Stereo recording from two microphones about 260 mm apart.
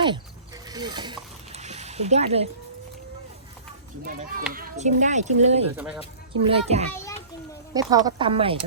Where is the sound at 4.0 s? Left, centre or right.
Right.